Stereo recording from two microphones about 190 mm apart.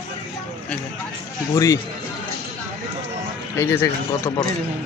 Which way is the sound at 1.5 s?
15° left (ahead or behind).